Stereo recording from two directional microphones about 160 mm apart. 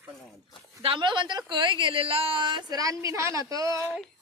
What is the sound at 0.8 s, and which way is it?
A woman's voice, 30° right (ahead or behind).